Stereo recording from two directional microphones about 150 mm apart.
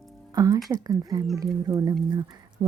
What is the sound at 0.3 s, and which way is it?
Speech, 25° right (ahead or behind).